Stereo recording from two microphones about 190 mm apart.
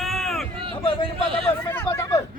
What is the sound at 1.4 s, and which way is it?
Speech, 10° left (ahead or behind).